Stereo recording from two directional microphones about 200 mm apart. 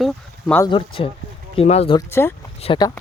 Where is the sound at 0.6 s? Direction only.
25° left (ahead or behind).